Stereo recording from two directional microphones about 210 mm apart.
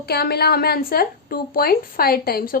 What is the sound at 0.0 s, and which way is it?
A woman's voice, 50° left (ahead or behind).